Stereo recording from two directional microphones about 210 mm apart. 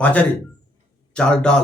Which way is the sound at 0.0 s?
5° left (ahead or behind).